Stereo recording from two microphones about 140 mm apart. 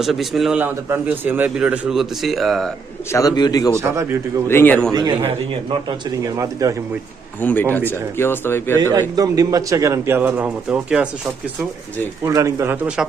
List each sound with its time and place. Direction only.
0.0 s a man's voice: centre (ahead or behind)
0.6 s a man's voice: 15° right (ahead or behind)
3.1 s speech: 25° left (ahead or behind)
3.8 s a man's voice: 20° right (ahead or behind)
4.4 s speech: 15° left (ahead or behind)
4.9 s speech: 30° right (ahead or behind)
6.2 s a man's voice: 25° right (ahead or behind)
7.4 s speech: 15° left (ahead or behind)
8.8 s a man's voice: 25° right (ahead or behind); by 11.1 s 10° right (ahead or behind)
12.2 s a man's voice: 20° right (ahead or behind)